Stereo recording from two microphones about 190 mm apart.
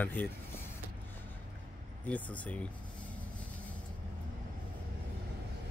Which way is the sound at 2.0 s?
10° left (ahead or behind).